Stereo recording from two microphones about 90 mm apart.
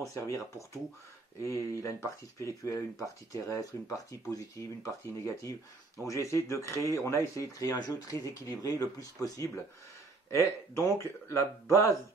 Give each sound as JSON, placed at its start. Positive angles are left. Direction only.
{"t": 0.0, "sound": "speech", "side_deg": 35}